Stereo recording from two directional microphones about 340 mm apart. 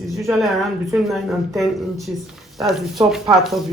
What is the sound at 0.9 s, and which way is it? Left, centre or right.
Speech, centre.